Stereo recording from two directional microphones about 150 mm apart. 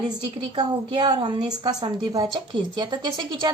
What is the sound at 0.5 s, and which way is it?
A woman's voice, 30° right (ahead or behind).